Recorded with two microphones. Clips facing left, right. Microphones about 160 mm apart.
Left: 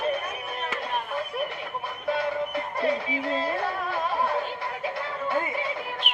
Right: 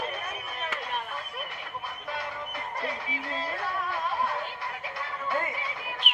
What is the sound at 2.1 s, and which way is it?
Music, 30° left (ahead or behind).